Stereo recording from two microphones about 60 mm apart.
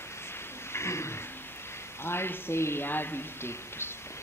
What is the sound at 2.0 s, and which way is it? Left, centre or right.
Speech, left.